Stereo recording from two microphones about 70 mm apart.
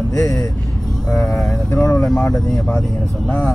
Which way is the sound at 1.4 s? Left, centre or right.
Centre.